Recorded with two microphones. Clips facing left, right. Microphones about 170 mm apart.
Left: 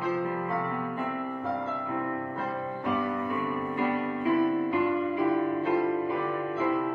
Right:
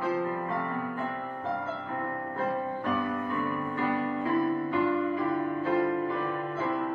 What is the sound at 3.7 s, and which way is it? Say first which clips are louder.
Music: even; 15° left (ahead or behind).